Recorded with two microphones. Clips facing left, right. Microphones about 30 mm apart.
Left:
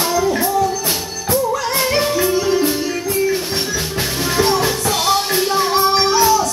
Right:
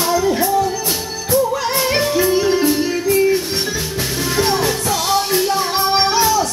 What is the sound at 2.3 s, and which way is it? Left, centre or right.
Music, centre.